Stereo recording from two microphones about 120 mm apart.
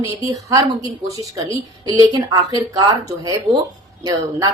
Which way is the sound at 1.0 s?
30° right (ahead or behind).